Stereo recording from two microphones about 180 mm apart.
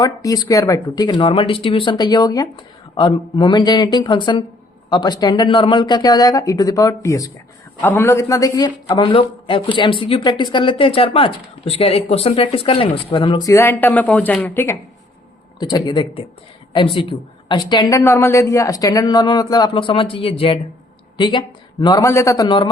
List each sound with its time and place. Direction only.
0.0 s a man's voice: 20° left (ahead or behind)
15.5 s a man's voice: 25° left (ahead or behind)